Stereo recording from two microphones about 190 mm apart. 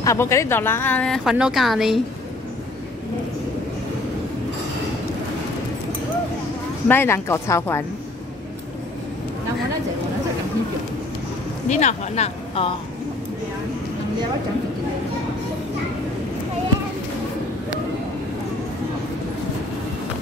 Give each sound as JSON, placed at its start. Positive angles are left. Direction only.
{"t": 0.0, "sound": "a woman's voice", "side_deg": 15}
{"t": 6.9, "sound": "a woman's voice", "side_deg": 10}
{"t": 11.7, "sound": "speech", "side_deg": 35}